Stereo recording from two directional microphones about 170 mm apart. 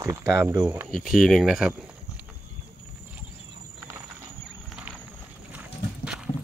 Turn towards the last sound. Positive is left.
turn(degrees=-5)  # may be behind; listen again after turning